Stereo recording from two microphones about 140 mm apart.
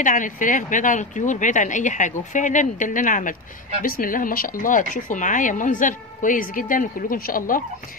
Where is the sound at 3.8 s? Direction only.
85° left.